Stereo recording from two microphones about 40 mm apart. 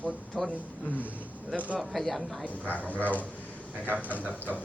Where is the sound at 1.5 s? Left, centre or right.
Right.